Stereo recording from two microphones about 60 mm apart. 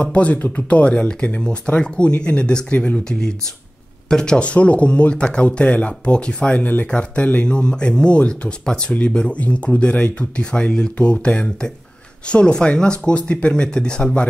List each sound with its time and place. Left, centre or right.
0.0 s speech: left
7.4 s speech: centre